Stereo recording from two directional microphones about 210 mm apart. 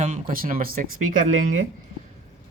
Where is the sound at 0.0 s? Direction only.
40° right (ahead or behind).